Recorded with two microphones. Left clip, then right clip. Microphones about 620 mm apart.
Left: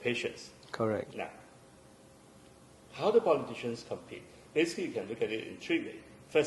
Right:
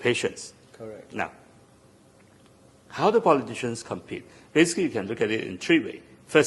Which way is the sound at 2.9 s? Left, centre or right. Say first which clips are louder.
Right 7 dB; right.